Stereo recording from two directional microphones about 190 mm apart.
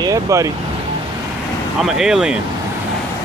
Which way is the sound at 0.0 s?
15° right (ahead or behind).